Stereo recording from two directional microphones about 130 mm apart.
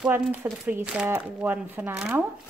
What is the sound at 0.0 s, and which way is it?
Speech, 15° right (ahead or behind).